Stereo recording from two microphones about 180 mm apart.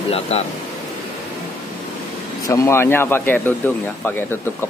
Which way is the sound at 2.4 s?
15° left (ahead or behind).